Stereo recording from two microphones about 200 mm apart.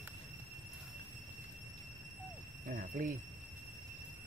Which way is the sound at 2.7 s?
45° right (ahead or behind).